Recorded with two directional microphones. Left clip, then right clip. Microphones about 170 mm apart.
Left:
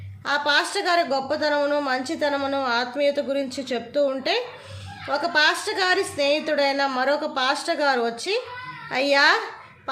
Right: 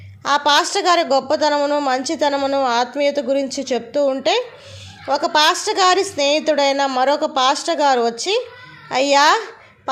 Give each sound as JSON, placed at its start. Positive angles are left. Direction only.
{"t": 0.3, "sound": "a woman's voice", "side_deg": -40}